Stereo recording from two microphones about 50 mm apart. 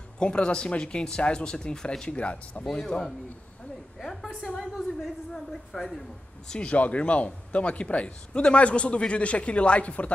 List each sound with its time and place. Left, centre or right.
0.2 s a man's voice: centre
4.0 s a sound: centre
4.5 s a woman's voice: centre
6.7 s a man's voice: left